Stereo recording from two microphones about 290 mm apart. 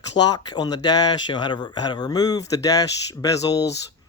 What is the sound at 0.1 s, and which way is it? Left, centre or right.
Speech, centre.